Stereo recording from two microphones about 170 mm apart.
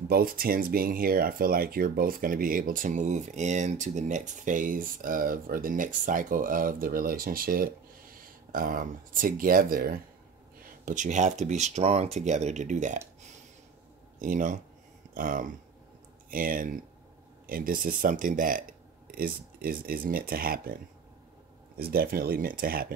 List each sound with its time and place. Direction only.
0.1 s speech: 60° right (ahead or behind)
14.2 s speech: 50° right (ahead or behind)